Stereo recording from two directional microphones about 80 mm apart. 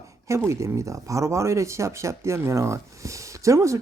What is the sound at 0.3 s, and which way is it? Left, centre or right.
Speech, right.